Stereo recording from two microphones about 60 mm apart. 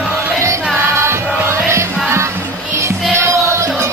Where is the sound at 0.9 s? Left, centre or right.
Right.